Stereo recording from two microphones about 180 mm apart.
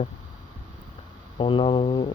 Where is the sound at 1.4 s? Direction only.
25° left (ahead or behind).